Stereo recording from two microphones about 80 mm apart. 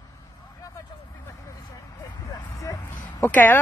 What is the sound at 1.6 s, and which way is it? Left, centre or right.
Vehicle, left.